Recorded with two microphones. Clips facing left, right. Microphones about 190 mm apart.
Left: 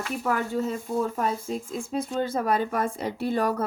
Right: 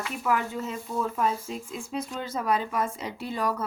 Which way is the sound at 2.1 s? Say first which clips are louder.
Left 3 dB; 50° left (ahead or behind).